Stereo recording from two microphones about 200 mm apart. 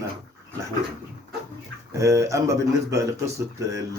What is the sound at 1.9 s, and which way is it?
Speech, 15° right (ahead or behind).